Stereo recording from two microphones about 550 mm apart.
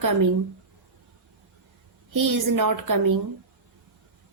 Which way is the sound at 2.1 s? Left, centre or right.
Right.